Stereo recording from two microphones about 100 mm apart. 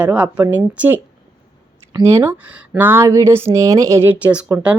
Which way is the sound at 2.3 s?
15° right (ahead or behind).